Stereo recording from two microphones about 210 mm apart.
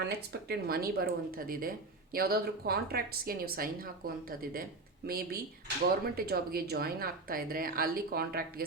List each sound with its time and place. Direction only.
0.0 s a woman's voice: 50° right (ahead or behind)